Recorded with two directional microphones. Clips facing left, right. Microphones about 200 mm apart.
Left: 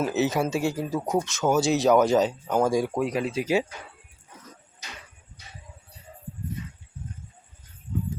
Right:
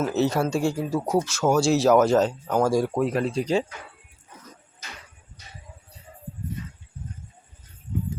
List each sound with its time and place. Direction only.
0.1 s speech: centre (ahead or behind)